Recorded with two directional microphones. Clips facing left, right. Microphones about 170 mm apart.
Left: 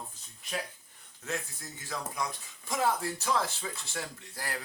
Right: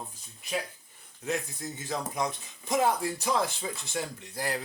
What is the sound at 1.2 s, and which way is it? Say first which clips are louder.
Speech: right 5 dB; 20° right (ahead or behind).